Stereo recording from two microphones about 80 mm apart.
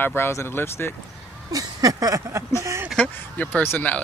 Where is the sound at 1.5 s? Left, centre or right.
Right.